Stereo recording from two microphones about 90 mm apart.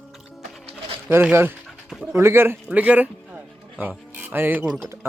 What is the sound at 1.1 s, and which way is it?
Speech, 25° right (ahead or behind).